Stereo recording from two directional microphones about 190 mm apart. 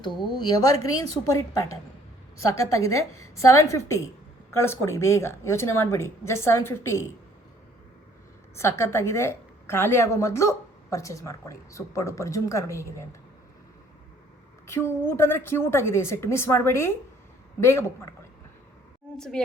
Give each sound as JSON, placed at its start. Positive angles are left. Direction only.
{"t": 0.3, "sound": "a woman's voice", "side_deg": 20}
{"t": 8.5, "sound": "a woman's voice", "side_deg": 15}
{"t": 14.7, "sound": "a woman's voice", "side_deg": 10}
{"t": 19.1, "sound": "a woman's voice", "side_deg": 5}